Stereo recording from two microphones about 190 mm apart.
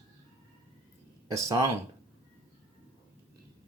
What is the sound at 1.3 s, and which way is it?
Speech, 15° right (ahead or behind).